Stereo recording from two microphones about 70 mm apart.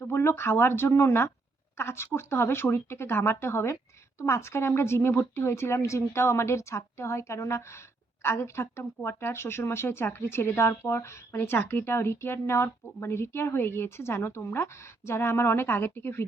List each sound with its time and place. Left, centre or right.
0.0 s a woman's voice: left